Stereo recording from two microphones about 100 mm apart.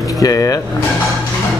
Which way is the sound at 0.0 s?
35° left (ahead or behind).